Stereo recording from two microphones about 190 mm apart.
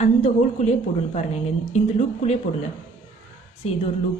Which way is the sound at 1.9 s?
35° left (ahead or behind).